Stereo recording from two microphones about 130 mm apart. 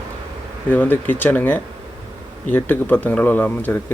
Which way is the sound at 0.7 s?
15° left (ahead or behind).